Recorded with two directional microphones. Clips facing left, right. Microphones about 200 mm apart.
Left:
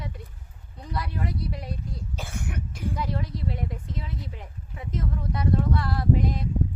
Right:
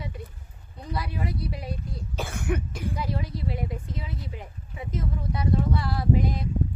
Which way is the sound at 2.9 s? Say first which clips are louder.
Left 1 dB; 5° right (ahead or behind).